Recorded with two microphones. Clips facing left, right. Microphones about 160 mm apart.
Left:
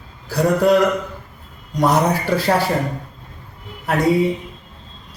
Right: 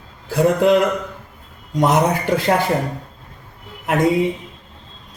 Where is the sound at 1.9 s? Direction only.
15° right (ahead or behind).